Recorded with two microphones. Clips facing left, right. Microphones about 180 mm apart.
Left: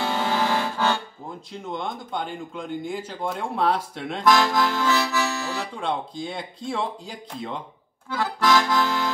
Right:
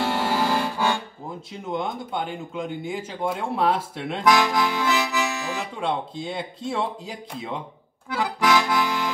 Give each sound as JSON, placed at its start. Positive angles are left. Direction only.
{"t": 0.0, "sound": "music", "side_deg": -5}
{"t": 1.5, "sound": "speech", "side_deg": -5}
{"t": 4.2, "sound": "accordion", "side_deg": -15}
{"t": 5.6, "sound": "speech", "side_deg": -5}
{"t": 8.1, "sound": "accordion", "side_deg": -15}